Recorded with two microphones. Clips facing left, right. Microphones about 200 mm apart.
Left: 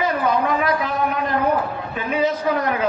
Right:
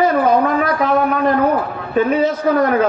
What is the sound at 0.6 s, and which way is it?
Speech, 45° right (ahead or behind).